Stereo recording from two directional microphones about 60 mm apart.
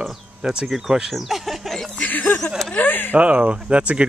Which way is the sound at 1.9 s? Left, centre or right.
Left.